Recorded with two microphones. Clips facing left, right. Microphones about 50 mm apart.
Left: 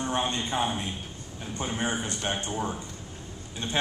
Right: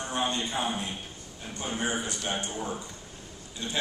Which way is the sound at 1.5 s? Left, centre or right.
Left.